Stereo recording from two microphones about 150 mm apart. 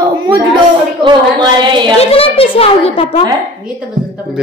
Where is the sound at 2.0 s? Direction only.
40° left (ahead or behind).